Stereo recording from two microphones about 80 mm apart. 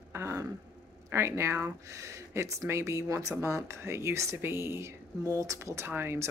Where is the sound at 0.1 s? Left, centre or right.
Right.